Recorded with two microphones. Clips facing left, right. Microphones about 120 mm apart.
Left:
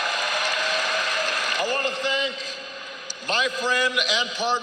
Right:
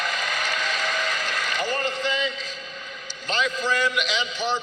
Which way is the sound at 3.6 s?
40° left (ahead or behind).